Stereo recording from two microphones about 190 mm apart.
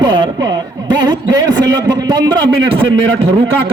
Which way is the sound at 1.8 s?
20° right (ahead or behind).